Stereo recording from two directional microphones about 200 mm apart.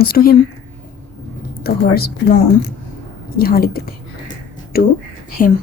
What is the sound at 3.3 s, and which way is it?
A woman's voice, 50° left (ahead or behind).